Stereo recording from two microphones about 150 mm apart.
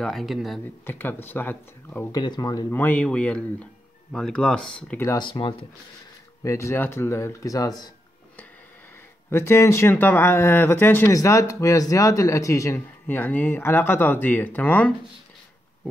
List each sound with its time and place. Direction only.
0.0 s speech: centre (ahead or behind)
0.8 s speech: 15° left (ahead or behind)
2.1 s speech: 25° left (ahead or behind)
2.7 s speech: 10° left (ahead or behind)
5.0 s speech: 30° left (ahead or behind)
6.4 s speech: 20° left (ahead or behind)
9.3 s speech: 15° left (ahead or behind)